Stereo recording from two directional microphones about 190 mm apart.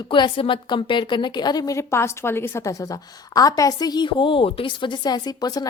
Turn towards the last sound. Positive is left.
turn(degrees=20)  # may be behind; listen again after turning